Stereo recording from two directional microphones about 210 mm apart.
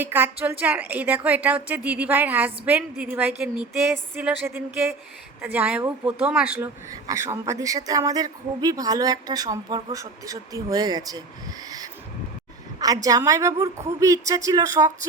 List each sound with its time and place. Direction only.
0.0 s speech: 10° right (ahead or behind)
12.8 s speech: 15° right (ahead or behind)